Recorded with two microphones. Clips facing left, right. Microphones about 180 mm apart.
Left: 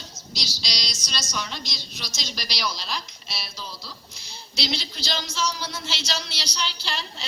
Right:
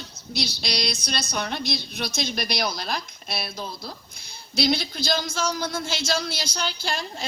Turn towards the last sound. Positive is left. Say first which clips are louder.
# right 4 dB
turn(degrees=-50)  # may be behind; listen again after turning